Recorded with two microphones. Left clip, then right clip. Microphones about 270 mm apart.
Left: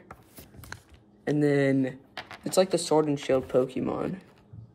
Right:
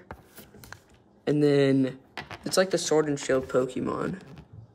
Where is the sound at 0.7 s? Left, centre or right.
Left.